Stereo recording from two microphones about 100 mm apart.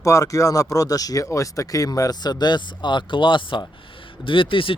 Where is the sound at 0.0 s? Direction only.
35° left (ahead or behind).